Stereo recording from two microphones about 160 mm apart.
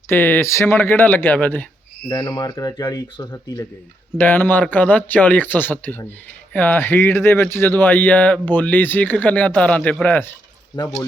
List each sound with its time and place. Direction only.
0.1 s speech: 15° left (ahead or behind)
2.0 s speech: 25° left (ahead or behind)